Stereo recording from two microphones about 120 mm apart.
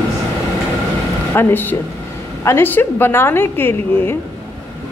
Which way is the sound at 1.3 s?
15° left (ahead or behind).